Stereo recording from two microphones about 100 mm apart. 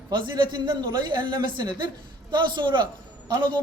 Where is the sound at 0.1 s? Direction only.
50° right (ahead or behind).